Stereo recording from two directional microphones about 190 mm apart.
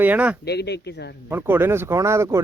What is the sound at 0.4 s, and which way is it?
Speech, 60° left (ahead or behind).